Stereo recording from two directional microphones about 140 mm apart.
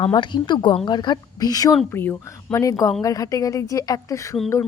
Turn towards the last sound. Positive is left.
turn(degrees=20)  # may be behind; listen again after turning